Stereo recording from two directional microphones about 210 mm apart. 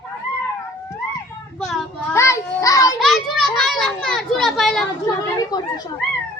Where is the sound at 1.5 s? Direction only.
Centre (ahead or behind).